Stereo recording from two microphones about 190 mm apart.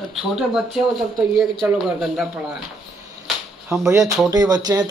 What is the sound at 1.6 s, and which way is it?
Speech, 5° right (ahead or behind).